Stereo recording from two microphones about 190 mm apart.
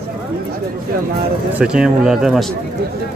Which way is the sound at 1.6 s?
5° right (ahead or behind).